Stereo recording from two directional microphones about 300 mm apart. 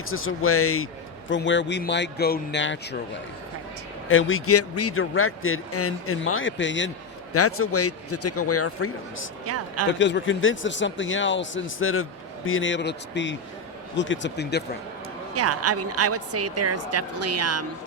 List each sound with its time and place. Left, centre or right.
0.0 s a man's voice: left
4.1 s a man's voice: left
9.5 s speech: right
10.0 s a man's voice: left
15.4 s speech: right